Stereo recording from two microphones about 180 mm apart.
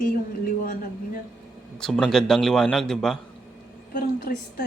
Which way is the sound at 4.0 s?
50° left (ahead or behind).